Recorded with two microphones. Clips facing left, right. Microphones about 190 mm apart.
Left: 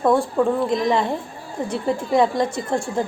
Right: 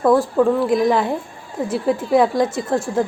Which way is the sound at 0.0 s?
Centre (ahead or behind).